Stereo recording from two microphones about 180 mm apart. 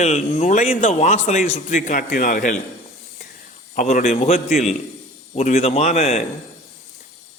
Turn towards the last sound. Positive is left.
turn(degrees=35)  # may be behind; listen again after turning